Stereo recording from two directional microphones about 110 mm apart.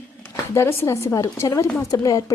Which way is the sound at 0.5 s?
25° left (ahead or behind).